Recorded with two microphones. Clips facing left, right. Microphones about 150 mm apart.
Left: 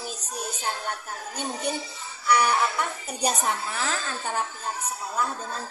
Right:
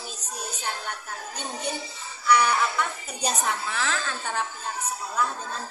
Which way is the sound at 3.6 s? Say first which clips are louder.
Right 1 dB; 30° left (ahead or behind).